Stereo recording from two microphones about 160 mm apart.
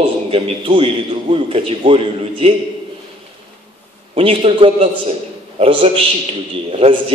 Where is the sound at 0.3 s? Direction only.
35° right (ahead or behind).